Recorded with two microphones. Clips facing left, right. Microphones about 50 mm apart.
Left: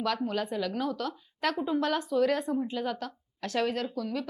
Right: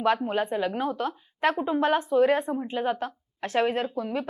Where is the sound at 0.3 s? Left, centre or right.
Right.